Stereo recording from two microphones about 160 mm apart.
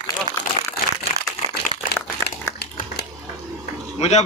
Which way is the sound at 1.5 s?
90° left.